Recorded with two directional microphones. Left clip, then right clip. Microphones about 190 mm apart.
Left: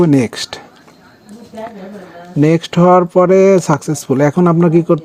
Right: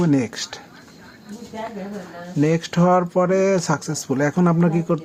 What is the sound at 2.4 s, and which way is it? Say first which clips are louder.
Speech: left 8 dB; 35° left (ahead or behind).